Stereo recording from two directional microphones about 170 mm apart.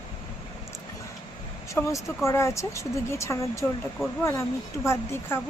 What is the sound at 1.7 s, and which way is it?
Speech, 15° left (ahead or behind).